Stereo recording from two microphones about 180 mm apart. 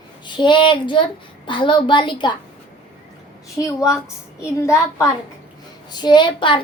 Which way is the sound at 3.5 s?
20° left (ahead or behind).